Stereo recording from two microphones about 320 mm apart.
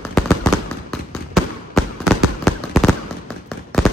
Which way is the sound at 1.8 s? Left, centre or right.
Centre.